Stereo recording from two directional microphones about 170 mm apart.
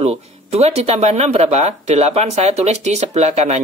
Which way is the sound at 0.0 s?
35° right (ahead or behind).